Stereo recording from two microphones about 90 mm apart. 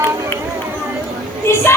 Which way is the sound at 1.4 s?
30° left (ahead or behind).